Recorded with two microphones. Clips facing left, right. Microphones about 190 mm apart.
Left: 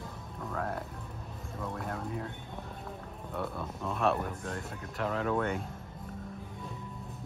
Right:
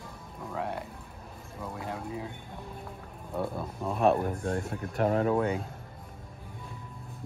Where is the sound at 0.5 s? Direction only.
5° right (ahead or behind).